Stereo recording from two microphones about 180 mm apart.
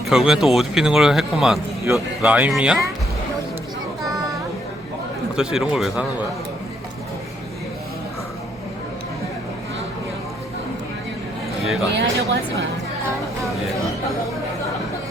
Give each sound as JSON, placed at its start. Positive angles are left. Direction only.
{"t": 0.0, "sound": "speech", "side_deg": 0}
{"t": 1.8, "sound": "speech", "side_deg": -10}
{"t": 5.4, "sound": "speech", "side_deg": -5}
{"t": 11.6, "sound": "speech", "side_deg": 0}
{"t": 11.9, "sound": "speech", "side_deg": -65}